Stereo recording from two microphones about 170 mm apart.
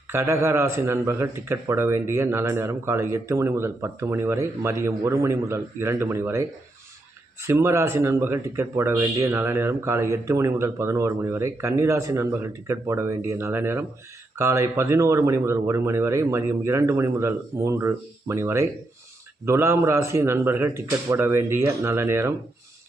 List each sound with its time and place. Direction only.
0.1 s speech: 15° right (ahead or behind)
7.4 s speech: 15° right (ahead or behind)